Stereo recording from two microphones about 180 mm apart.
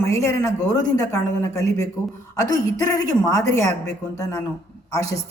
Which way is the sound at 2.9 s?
20° left (ahead or behind).